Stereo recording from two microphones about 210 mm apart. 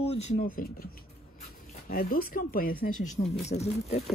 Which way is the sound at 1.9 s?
45° left (ahead or behind).